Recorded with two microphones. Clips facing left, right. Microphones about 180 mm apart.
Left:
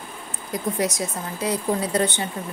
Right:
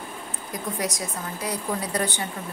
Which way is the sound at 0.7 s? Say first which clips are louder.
Left 4 dB; 25° left (ahead or behind).